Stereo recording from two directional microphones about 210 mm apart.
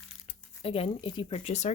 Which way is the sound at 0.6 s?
25° left (ahead or behind).